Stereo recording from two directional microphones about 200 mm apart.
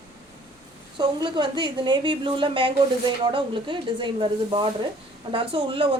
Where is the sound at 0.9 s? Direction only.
25° right (ahead or behind).